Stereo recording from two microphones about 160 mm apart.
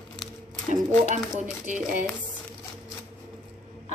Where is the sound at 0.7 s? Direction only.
50° right (ahead or behind).